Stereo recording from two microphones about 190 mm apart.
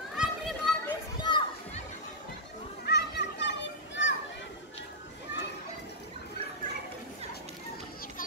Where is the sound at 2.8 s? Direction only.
60° left (ahead or behind).